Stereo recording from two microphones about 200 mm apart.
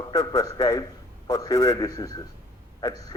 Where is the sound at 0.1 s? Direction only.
20° left (ahead or behind).